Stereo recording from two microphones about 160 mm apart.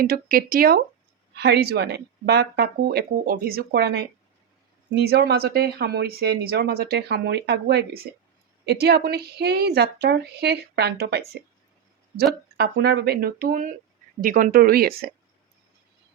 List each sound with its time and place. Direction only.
0.0 s speech: 65° right (ahead or behind)
1.4 s speech: 90° right; by 15.1 s 70° right (ahead or behind)